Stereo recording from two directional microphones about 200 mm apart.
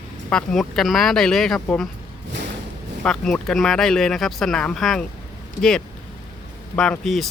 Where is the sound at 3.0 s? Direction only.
5° left (ahead or behind).